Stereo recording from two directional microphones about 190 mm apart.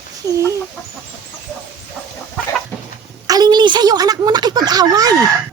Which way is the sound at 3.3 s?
20° right (ahead or behind).